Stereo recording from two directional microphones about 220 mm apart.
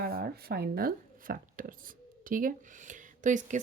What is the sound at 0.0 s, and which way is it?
Speech, 40° right (ahead or behind).